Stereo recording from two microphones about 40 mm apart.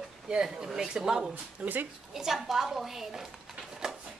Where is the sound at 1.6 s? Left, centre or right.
Right.